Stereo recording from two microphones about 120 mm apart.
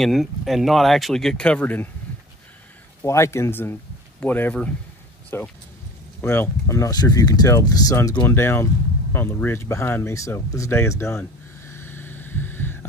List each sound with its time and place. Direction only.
0.0 s speech: centre (ahead or behind)
3.0 s speech: 25° left (ahead or behind)
11.6 s a sound: 20° left (ahead or behind)